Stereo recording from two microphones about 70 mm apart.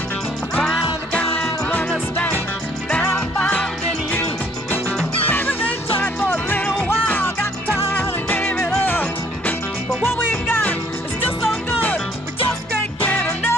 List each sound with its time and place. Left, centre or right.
1.1 s music: left
5.3 s music: left
13.0 s music: left